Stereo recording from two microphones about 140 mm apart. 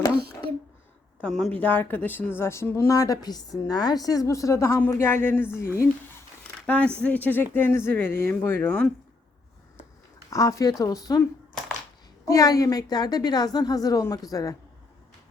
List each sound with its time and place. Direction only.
1.3 s speech: 5° left (ahead or behind)
10.2 s speech: 25° left (ahead or behind)
12.3 s speech: 25° left (ahead or behind)